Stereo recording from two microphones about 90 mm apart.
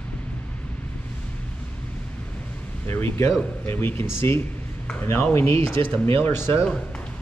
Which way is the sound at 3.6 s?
25° left (ahead or behind).